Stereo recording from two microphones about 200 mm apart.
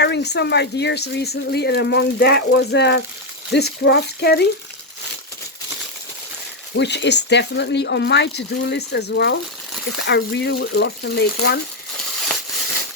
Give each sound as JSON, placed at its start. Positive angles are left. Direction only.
{"t": 0.0, "sound": "speech", "side_deg": 55}
{"t": 6.7, "sound": "speech", "side_deg": 60}